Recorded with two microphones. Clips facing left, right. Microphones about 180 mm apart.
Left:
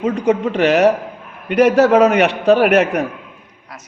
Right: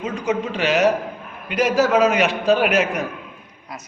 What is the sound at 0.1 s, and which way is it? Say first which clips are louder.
A man's voice: left 6 dB; 65° left (ahead or behind).